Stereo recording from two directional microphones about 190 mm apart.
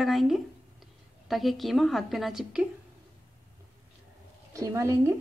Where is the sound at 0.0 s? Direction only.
Centre (ahead or behind).